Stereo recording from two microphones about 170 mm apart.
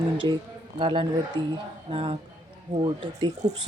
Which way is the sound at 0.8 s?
30° right (ahead or behind).